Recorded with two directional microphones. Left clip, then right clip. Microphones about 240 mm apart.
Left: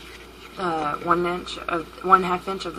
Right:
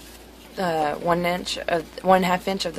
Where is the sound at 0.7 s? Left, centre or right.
Right.